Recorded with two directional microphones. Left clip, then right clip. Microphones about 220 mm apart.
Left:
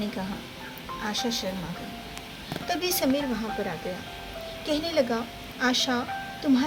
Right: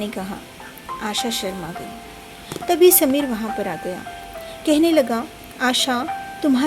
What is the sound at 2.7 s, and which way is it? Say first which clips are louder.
Speech: right 12 dB; 40° right (ahead or behind).